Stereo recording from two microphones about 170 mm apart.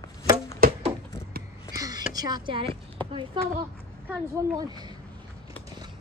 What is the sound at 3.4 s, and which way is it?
Speech, 25° right (ahead or behind).